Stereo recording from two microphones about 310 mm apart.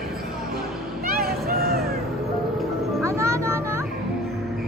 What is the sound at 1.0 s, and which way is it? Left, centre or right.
Vehicle, right.